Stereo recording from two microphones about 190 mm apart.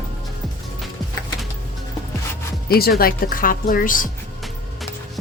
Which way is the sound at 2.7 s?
55° left (ahead or behind).